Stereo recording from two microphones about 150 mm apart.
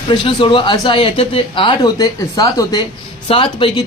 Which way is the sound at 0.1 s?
35° left (ahead or behind).